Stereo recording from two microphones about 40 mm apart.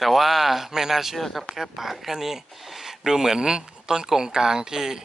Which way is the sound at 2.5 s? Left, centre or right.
Centre.